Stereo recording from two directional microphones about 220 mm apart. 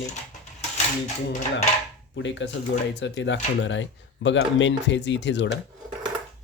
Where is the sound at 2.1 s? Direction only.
55° left (ahead or behind).